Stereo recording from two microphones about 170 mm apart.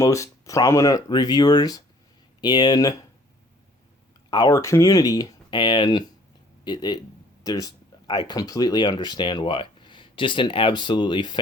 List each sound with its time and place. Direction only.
0.0 s speech: 20° left (ahead or behind)
4.3 s speech: 20° left (ahead or behind)